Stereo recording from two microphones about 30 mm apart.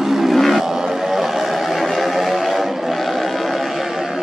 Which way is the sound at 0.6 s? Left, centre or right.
Centre.